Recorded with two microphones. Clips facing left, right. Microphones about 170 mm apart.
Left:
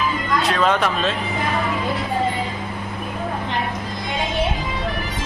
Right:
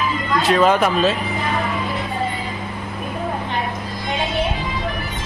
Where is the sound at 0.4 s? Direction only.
5° right (ahead or behind).